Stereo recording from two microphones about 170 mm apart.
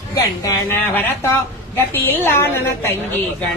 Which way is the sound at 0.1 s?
20° left (ahead or behind).